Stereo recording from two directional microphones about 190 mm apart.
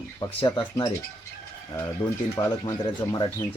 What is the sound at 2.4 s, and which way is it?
Speech, 20° left (ahead or behind).